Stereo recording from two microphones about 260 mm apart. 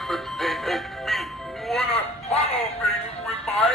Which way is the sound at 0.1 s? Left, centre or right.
Centre.